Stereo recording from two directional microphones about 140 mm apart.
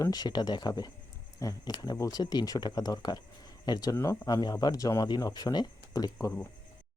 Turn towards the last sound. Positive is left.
turn(degrees=25)  # may be behind; listen again after turning